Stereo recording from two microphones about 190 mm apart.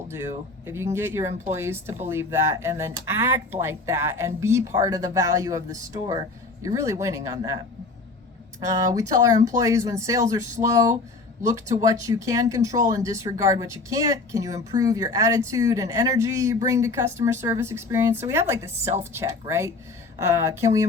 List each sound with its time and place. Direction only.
0.6 s speech: 15° right (ahead or behind)
8.7 s speech: 15° right (ahead or behind)